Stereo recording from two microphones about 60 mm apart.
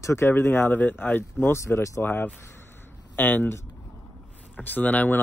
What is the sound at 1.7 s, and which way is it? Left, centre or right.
Speech, left.